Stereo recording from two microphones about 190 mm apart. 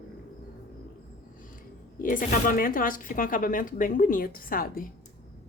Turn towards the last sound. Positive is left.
turn(degrees=50)  # may be behind; listen again after turning